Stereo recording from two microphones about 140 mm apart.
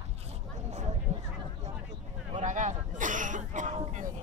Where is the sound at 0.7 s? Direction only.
55° right (ahead or behind).